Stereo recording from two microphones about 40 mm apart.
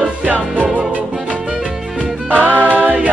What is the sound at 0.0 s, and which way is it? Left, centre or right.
Music, right.